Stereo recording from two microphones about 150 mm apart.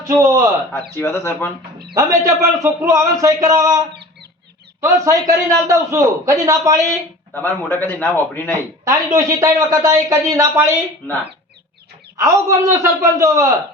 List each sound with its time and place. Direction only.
0.0 s a man's voice: 20° right (ahead or behind)
0.7 s a man's voice: 15° left (ahead or behind)
1.9 s a man's voice: 20° right (ahead or behind)
4.8 s a man's voice: 20° right (ahead or behind)
7.3 s a man's voice: 15° left (ahead or behind)
8.8 s a man's voice: 20° right (ahead or behind)
12.1 s a man's voice: 20° right (ahead or behind)